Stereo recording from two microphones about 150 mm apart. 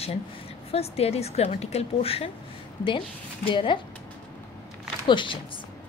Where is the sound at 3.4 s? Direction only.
35° left (ahead or behind).